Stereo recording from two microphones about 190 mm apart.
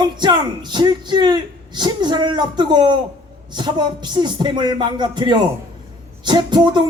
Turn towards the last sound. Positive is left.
turn(degrees=-25)  # may be behind; listen again after turning